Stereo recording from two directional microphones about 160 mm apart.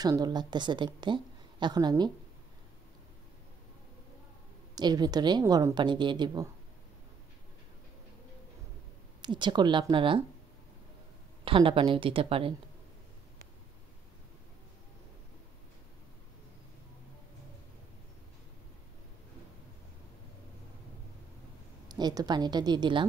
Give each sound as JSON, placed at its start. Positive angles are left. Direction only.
{"t": 0.0, "sound": "a woman's voice", "side_deg": -25}
{"t": 4.7, "sound": "a woman's voice", "side_deg": -25}
{"t": 9.2, "sound": "a woman's voice", "side_deg": -30}
{"t": 11.4, "sound": "a woman's voice", "side_deg": -35}
{"t": 21.8, "sound": "a woman's voice", "side_deg": -25}